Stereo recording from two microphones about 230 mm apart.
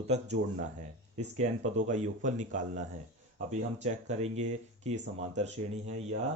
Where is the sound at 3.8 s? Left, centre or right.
Right.